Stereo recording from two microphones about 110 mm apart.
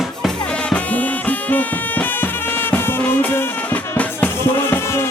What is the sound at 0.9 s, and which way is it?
Music, 15° left (ahead or behind).